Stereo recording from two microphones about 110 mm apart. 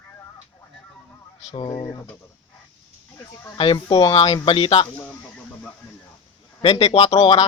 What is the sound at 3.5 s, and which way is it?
Speech, 50° left (ahead or behind).